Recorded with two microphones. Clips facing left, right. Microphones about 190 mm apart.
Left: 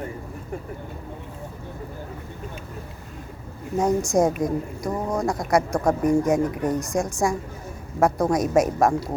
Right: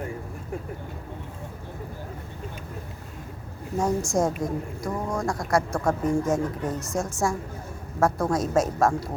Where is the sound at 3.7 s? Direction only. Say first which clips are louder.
Left 4 dB; 20° left (ahead or behind).